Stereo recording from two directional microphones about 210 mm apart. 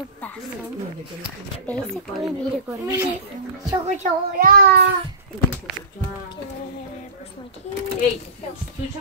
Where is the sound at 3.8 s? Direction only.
35° right (ahead or behind).